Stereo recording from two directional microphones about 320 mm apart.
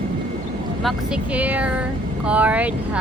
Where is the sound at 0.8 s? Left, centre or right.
Centre.